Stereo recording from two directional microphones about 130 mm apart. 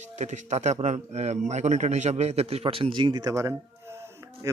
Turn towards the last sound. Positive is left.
turn(degrees=-25)  # may be behind; listen again after turning